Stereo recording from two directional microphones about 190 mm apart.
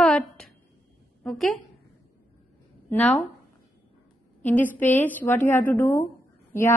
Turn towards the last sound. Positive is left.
turn(degrees=15)  # may be behind; listen again after turning